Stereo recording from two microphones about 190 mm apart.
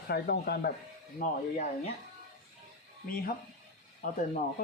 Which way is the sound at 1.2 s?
45° left (ahead or behind).